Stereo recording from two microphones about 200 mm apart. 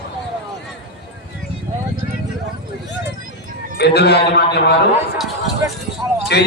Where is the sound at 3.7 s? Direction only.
55° left (ahead or behind).